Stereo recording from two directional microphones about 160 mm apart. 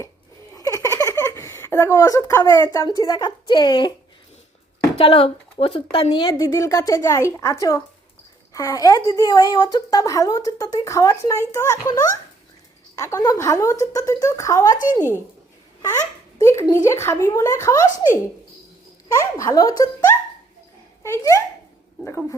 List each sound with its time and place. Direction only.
0.5 s giggle: 20° left (ahead or behind)
3.0 s a woman's voice: 25° left (ahead or behind)
4.9 s a woman's voice: 35° left (ahead or behind)
16.4 s speech: 20° left (ahead or behind)
19.1 s a woman's voice: 20° left (ahead or behind)